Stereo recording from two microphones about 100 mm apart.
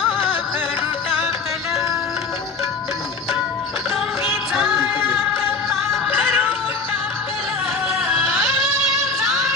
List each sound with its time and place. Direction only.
4.3 s music: centre (ahead or behind)
8.6 s female singing: centre (ahead or behind)